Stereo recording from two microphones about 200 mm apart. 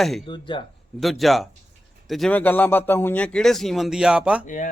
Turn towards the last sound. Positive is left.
turn(degrees=40)  # may be behind; listen again after turning